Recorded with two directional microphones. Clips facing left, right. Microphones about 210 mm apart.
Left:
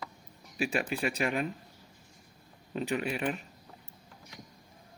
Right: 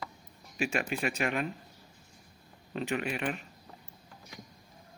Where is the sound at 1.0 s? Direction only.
35° left (ahead or behind).